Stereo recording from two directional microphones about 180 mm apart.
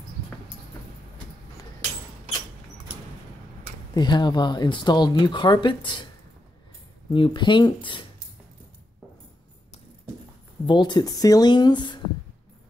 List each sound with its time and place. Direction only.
3.9 s speech: 25° left (ahead or behind)
7.1 s speech: 25° left (ahead or behind)
10.6 s speech: 25° left (ahead or behind)